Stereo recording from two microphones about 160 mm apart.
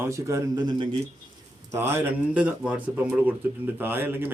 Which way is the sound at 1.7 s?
15° right (ahead or behind).